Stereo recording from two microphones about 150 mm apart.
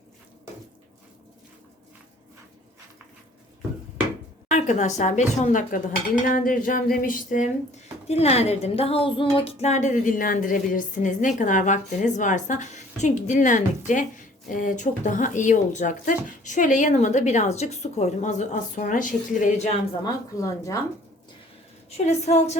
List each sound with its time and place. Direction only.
4.4 s a woman's voice: 50° left (ahead or behind)
8.0 s a woman's voice: 45° left (ahead or behind)
20.3 s speech: 20° left (ahead or behind)
21.8 s a woman's voice: 45° left (ahead or behind)